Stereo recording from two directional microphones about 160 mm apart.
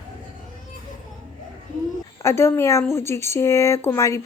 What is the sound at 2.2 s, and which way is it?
Speech, 15° left (ahead or behind).